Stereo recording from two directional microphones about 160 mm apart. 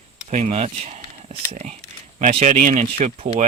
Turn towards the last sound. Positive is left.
turn(degrees=-45)  # may be behind; listen again after turning